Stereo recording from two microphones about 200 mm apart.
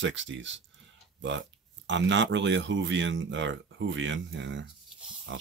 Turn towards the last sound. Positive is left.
turn(degrees=-65)  # may be behind; listen again after turning